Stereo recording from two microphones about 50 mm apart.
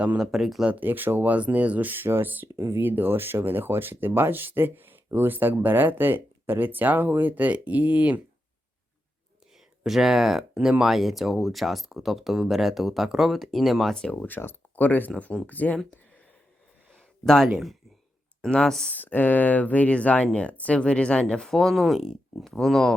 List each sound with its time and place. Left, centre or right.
0.2 s speech: centre
0.7 s speech: right
2.5 s speech: right
2.7 s speech: right
9.8 s speech: centre
10.8 s speech: centre
13.9 s speech: centre
14.3 s speech: left
16.9 s a sound: centre
18.5 s speech: centre
18.9 s speech: left
21.4 s speech: centre